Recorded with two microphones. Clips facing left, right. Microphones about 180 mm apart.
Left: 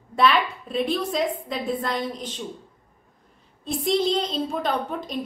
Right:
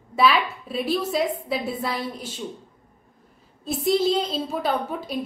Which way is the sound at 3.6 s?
5° right (ahead or behind).